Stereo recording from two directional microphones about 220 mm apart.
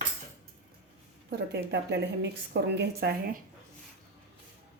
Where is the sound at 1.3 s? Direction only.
50° right (ahead or behind).